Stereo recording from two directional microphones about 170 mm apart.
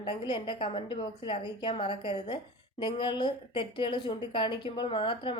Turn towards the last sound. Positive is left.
turn(degrees=30)  # may be behind; listen again after turning